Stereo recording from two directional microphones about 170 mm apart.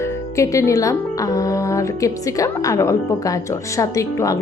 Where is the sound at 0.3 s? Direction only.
20° left (ahead or behind).